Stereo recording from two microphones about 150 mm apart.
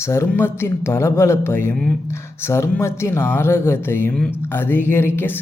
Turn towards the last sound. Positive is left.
turn(degrees=15)  # may be behind; listen again after turning